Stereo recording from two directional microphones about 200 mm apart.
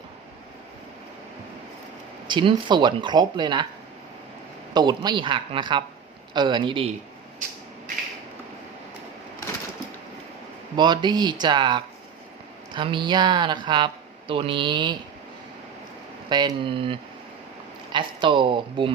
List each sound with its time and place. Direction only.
2.2 s speech: 25° right (ahead or behind)
4.7 s speech: 20° right (ahead or behind)
10.8 s speech: 20° right (ahead or behind)
16.3 s speech: 25° right (ahead or behind)